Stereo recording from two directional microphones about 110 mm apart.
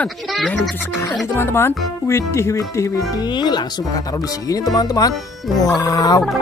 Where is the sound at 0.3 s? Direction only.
Centre (ahead or behind).